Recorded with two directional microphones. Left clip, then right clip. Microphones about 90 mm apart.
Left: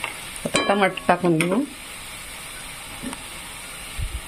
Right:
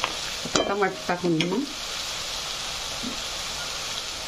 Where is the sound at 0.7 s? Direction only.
90° left.